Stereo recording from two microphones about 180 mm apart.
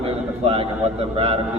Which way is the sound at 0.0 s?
35° right (ahead or behind).